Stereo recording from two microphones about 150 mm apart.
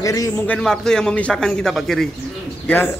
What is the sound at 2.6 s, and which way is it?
Speech, 10° left (ahead or behind).